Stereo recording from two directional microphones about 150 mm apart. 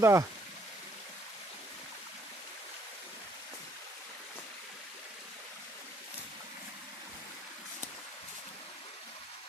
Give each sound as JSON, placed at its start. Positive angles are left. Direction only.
{"t": 0.0, "sound": "speech", "side_deg": -20}